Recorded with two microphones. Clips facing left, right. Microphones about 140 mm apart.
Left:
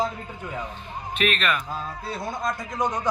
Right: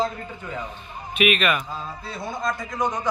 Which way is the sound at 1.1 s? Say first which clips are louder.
Right 4 dB; 10° right (ahead or behind).